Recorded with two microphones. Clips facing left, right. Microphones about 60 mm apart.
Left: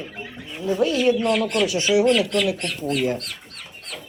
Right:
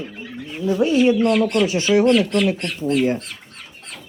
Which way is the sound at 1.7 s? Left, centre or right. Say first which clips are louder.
Right 2 dB; right.